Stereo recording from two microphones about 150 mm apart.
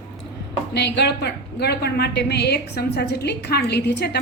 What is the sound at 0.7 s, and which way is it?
A woman's voice, 90° left.